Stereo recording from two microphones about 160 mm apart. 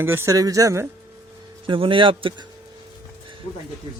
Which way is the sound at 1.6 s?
30° right (ahead or behind).